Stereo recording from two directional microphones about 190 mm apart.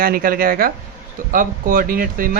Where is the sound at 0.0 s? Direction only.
50° right (ahead or behind).